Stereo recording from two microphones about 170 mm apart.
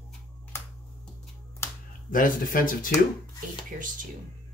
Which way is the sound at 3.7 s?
50° right (ahead or behind).